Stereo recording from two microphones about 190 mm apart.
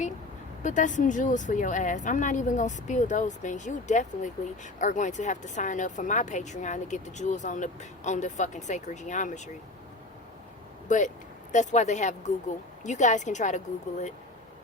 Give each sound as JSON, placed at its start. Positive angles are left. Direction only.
{"t": 0.6, "sound": "speech", "side_deg": 40}
{"t": 10.8, "sound": "speech", "side_deg": 40}